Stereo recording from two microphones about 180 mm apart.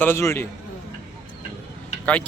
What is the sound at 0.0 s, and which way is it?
Speech, 15° left (ahead or behind).